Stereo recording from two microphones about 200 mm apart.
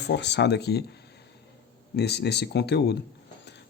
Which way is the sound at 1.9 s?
55° left (ahead or behind).